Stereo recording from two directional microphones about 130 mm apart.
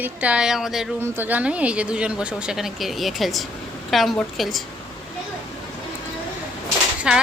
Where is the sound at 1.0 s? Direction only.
15° right (ahead or behind); by 4.6 s centre (ahead or behind).